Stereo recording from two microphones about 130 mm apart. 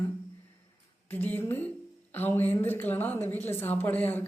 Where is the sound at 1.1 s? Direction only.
15° left (ahead or behind).